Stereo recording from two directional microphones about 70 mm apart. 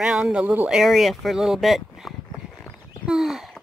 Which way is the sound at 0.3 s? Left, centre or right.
Centre.